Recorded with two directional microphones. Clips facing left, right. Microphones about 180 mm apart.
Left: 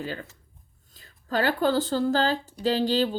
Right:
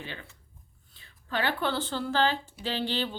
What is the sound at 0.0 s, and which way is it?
Speech, 40° left (ahead or behind).